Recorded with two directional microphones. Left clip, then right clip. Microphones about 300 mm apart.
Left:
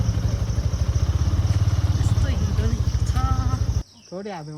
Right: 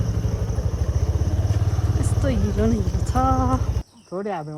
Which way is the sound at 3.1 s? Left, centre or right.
Centre.